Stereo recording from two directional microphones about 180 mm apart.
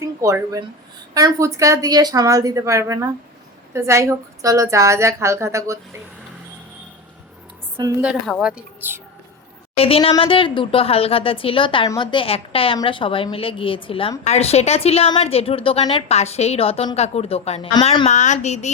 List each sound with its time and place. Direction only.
0.0 s a woman's voice: 15° right (ahead or behind)
7.8 s speech: 20° right (ahead or behind)
8.0 s a woman's voice: 5° right (ahead or behind)
9.7 s a woman's voice: 30° left (ahead or behind)